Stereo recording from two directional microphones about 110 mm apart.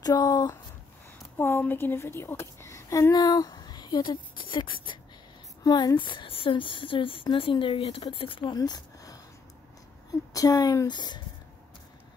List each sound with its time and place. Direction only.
0.0 s speech: 35° left (ahead or behind)
1.4 s a woman's voice: 20° left (ahead or behind); by 4.9 s 50° left (ahead or behind)
5.6 s speech: 35° left (ahead or behind); by 8.5 s 50° left (ahead or behind)
8.5 s a sound: 35° left (ahead or behind)
10.3 s speech: 35° left (ahead or behind)